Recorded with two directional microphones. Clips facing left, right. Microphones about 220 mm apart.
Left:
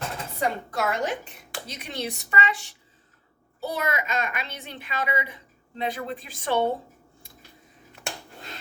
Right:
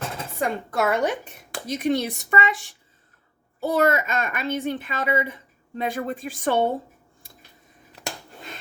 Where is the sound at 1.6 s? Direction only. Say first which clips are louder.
Right 11 dB; 50° right (ahead or behind).